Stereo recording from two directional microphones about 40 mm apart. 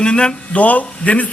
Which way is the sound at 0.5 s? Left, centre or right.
Left.